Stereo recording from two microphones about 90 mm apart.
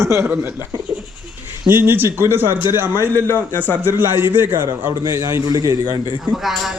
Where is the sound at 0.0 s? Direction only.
35° right (ahead or behind).